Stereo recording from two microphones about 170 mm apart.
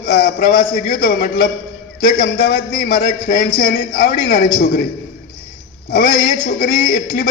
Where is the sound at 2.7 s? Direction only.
60° left (ahead or behind).